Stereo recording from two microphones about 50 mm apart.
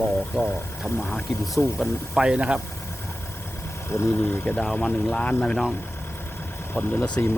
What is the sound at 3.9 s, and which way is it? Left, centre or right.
Speech, left.